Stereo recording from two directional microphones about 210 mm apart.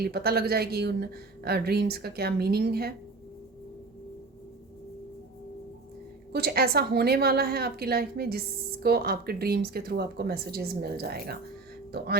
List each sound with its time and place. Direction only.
0.0 s speech: 45° right (ahead or behind)
6.3 s speech: 45° right (ahead or behind)